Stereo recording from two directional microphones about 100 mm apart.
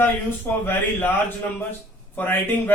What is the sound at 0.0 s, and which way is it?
A man's voice, 20° left (ahead or behind).